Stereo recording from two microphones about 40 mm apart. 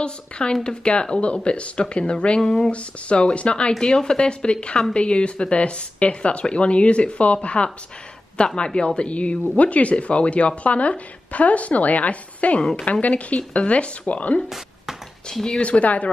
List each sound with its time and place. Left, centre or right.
0.0 s speech: left
3.8 s a woman's voice: centre; by 14.4 s left
15.3 s speech: centre
15.6 s a woman's voice: left